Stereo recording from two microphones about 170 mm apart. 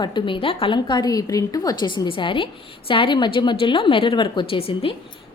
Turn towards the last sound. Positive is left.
turn(degrees=30)  # may be behind; listen again after turning